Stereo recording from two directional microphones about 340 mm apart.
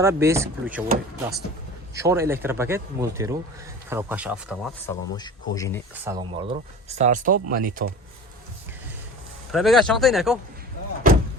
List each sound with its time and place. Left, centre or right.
0.0 s speech: centre
2.0 s speech: centre
4.9 s speech: centre
6.1 s speech: centre
9.5 s speech: centre